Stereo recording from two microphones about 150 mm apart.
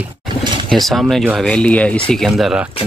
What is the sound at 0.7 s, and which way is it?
Speech, centre (ahead or behind).